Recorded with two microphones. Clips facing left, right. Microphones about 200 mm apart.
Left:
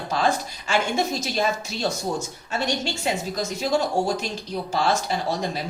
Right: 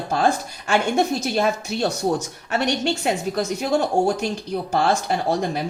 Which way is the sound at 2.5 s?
65° right (ahead or behind).